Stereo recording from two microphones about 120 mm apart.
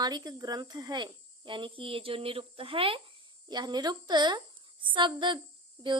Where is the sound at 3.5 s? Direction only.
35° right (ahead or behind).